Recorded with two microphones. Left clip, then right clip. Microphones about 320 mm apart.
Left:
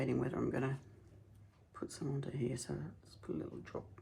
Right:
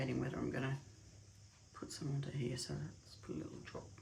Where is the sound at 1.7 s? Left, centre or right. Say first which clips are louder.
Left 4 dB; centre.